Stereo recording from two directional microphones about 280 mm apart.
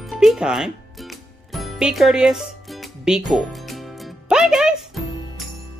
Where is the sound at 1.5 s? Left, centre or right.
Centre.